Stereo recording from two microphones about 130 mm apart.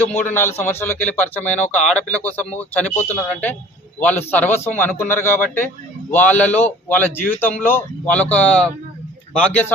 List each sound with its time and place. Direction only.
0.2 s a man's voice: 15° left (ahead or behind)